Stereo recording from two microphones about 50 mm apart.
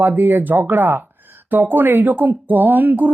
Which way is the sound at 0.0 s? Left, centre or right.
Right.